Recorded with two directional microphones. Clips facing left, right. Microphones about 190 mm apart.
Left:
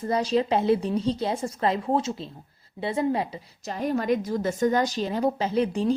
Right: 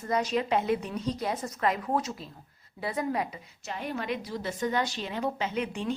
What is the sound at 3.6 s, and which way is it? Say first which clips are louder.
A woman's voice: left 8 dB; 40° left (ahead or behind).